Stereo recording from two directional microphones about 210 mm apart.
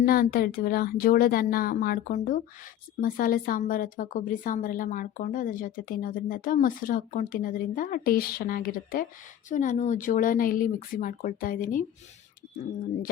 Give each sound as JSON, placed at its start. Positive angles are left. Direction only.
{"t": 0.0, "sound": "a woman's voice", "side_deg": 45}